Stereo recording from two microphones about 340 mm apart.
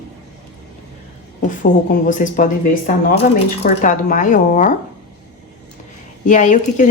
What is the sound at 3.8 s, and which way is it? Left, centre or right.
Speech, left.